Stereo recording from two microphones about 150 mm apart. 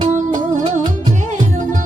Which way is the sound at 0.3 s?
30° right (ahead or behind).